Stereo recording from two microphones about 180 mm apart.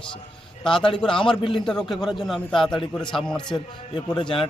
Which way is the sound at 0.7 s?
30° left (ahead or behind).